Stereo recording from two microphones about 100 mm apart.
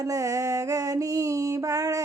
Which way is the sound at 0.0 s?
35° right (ahead or behind).